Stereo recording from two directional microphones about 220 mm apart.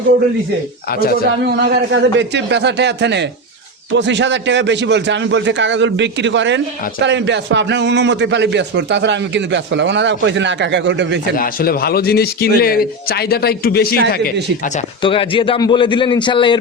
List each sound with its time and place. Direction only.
0.9 s speech: 40° left (ahead or behind)
1.5 s a man's voice: 50° right (ahead or behind)
11.3 s speech: 40° left (ahead or behind)
15.0 s a man's voice: 25° left (ahead or behind)